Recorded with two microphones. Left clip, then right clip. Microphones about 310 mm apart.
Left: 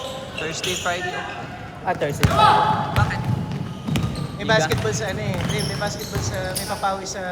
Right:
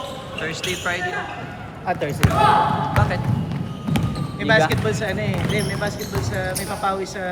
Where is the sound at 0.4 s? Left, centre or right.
Centre.